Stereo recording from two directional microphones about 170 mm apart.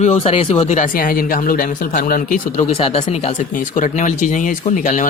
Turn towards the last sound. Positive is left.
turn(degrees=50)  # may be behind; listen again after turning